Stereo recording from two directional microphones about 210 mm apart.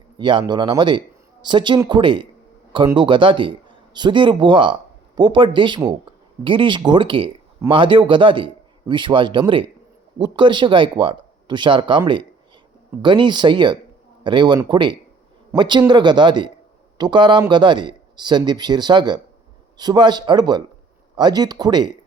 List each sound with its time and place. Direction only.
0.2 s a man's voice: 20° right (ahead or behind)